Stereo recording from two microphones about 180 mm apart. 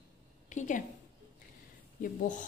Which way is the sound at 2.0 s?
45° left (ahead or behind).